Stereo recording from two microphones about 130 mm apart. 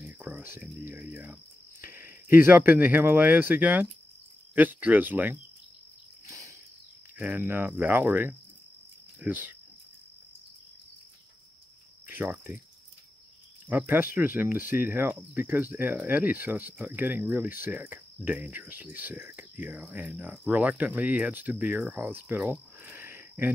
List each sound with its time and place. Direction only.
0.0 s a sound: 15° right (ahead or behind)
4.6 s speech: 15° right (ahead or behind)
6.2 s a sound: 25° right (ahead or behind)
7.2 s speech: 10° right (ahead or behind)
12.1 s cricket: 15° right (ahead or behind)
13.7 s speech: 15° right (ahead or behind)